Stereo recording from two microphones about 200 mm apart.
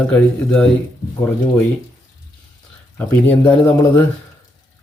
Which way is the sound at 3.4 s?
10° left (ahead or behind).